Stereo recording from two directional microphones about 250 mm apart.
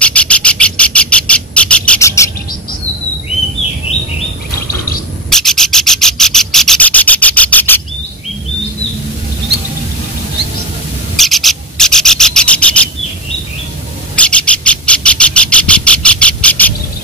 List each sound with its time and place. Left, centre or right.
0.0 s bird: centre
5.3 s rub: centre
11.1 s rub: centre
14.1 s bird: centre